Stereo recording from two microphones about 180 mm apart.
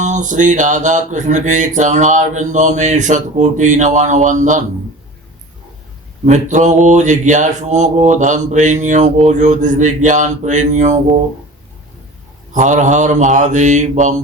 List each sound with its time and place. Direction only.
0.0 s mantra: 45° right (ahead or behind)
6.2 s mantra: 40° right (ahead or behind)
12.5 s mantra: 45° right (ahead or behind)